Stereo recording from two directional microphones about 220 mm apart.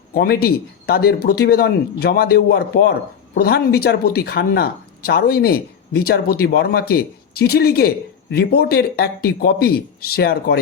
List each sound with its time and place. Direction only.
0.1 s speech: 45° left (ahead or behind)